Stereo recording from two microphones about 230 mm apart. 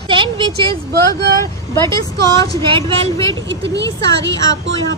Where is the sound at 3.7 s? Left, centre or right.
Right.